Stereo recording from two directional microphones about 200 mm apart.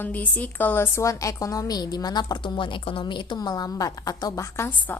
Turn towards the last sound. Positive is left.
turn(degrees=10)  # may be behind; listen again after turning